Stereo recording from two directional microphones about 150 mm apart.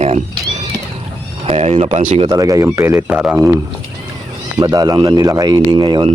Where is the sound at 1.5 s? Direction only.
45° right (ahead or behind).